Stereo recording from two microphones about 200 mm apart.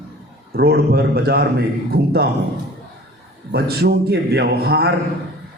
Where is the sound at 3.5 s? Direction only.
50° right (ahead or behind).